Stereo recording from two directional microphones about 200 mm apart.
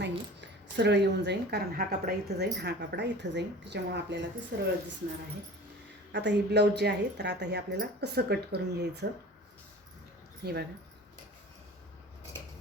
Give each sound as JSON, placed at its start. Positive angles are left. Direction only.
{"t": 0.0, "sound": "a sound", "side_deg": -60}
{"t": 2.0, "sound": "speech", "side_deg": -55}
{"t": 6.1, "sound": "speech", "side_deg": -60}
{"t": 10.4, "sound": "speech", "side_deg": -50}